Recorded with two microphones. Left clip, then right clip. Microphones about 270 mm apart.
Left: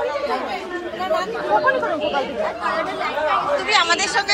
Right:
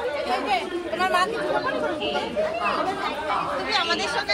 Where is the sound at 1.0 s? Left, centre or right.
Right.